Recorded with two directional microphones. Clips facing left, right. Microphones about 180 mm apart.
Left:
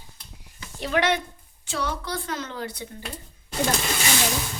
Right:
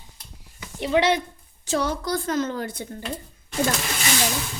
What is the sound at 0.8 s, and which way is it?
Speech, 25° right (ahead or behind).